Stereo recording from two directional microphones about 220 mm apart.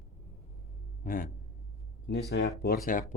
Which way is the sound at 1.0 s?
40° left (ahead or behind).